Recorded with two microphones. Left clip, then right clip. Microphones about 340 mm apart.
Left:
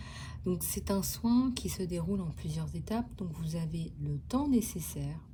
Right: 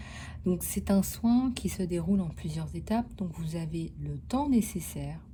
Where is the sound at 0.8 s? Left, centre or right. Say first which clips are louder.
Right 4 dB; centre.